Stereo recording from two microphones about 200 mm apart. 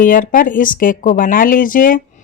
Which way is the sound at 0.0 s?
40° left (ahead or behind).